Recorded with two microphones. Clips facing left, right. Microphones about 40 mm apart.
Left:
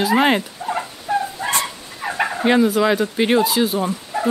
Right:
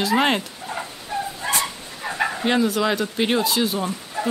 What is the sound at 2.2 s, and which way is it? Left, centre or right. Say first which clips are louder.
Speech: left 5 dB; centre.